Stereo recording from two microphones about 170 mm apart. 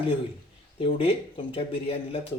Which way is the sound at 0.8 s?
30° left (ahead or behind).